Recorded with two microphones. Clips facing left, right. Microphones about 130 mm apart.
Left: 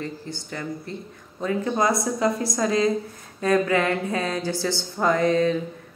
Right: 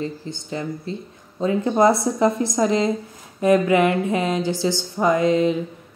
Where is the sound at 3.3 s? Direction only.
20° right (ahead or behind).